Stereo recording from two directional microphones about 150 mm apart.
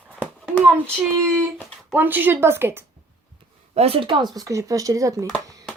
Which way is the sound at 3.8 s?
40° right (ahead or behind).